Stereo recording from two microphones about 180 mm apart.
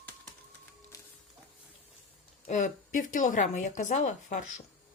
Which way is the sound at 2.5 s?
45° left (ahead or behind).